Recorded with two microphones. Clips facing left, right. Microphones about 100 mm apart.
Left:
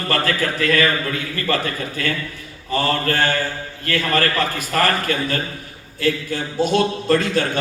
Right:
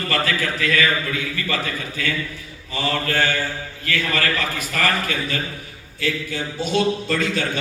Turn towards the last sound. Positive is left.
turn(degrees=45)  # may be behind; listen again after turning